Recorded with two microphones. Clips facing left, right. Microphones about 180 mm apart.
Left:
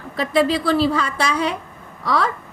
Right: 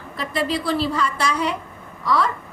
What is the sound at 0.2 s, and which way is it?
A woman's voice, 90° left.